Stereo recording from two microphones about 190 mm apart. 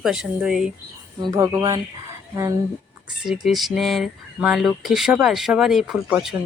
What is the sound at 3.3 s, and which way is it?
Speech, centre (ahead or behind).